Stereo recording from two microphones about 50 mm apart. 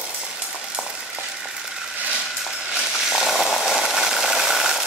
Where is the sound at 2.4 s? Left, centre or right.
Centre.